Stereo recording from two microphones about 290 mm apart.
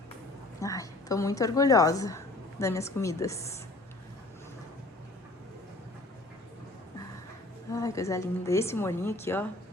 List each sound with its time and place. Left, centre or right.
0.6 s a woman's voice: centre
7.7 s a woman's voice: centre